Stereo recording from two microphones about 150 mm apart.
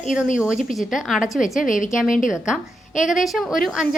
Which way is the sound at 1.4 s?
60° left (ahead or behind).